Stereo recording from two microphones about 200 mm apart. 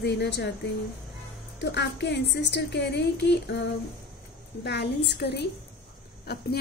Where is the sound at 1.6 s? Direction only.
60° left (ahead or behind).